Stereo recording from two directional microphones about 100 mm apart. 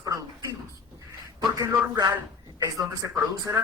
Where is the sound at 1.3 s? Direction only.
40° right (ahead or behind).